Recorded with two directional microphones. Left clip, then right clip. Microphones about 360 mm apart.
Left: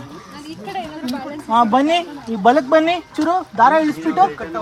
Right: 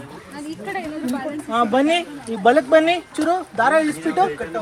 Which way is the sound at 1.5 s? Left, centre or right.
Left.